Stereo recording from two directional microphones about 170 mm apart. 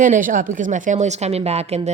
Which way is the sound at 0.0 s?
50° right (ahead or behind).